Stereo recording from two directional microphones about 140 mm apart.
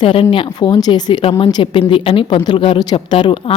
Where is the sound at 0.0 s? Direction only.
40° left (ahead or behind).